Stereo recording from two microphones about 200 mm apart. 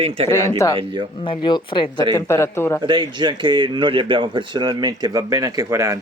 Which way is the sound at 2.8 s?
25° right (ahead or behind).